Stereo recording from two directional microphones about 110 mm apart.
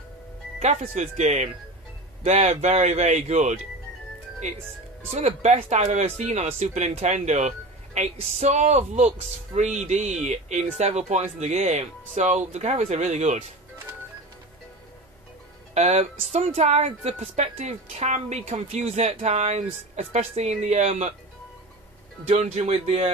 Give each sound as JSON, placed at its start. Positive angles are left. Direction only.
{"t": 0.6, "sound": "speech", "side_deg": -90}
{"t": 5.1, "sound": "speech", "side_deg": -90}
{"t": 15.7, "sound": "speech", "side_deg": -90}
{"t": 22.3, "sound": "speech", "side_deg": -85}